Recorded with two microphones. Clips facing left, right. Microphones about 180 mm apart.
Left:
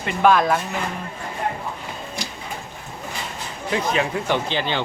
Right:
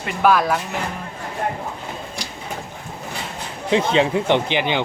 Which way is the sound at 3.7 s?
25° right (ahead or behind).